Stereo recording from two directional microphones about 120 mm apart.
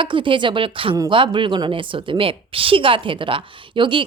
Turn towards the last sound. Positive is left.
turn(degrees=-45)  # may be behind; listen again after turning